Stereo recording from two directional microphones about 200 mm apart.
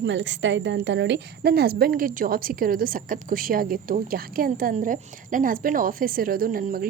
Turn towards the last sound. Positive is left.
turn(degrees=-45)  # may be behind; listen again after turning